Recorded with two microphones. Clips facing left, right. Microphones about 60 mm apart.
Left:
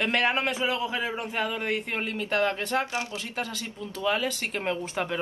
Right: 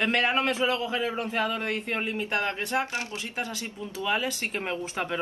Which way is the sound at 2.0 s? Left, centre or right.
Right.